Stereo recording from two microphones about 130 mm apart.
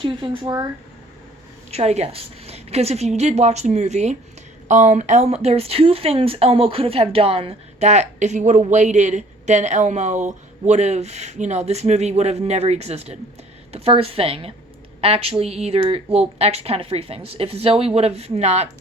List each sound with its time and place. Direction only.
0.0 s speech: 40° right (ahead or behind)
1.7 s speech: 55° right (ahead or behind)